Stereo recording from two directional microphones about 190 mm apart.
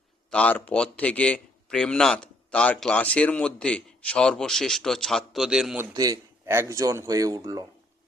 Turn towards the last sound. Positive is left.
turn(degrees=-20)  # may be behind; listen again after turning